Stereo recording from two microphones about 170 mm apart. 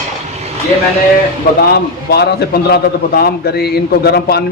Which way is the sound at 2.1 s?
70° left (ahead or behind).